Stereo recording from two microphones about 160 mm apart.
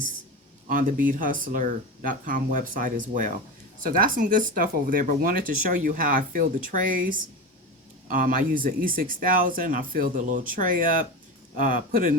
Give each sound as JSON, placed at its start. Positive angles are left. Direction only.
{"t": 0.7, "sound": "speech", "side_deg": -55}